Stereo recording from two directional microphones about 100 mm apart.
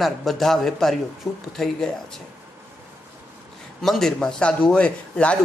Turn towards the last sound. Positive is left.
turn(degrees=10)  # may be behind; listen again after turning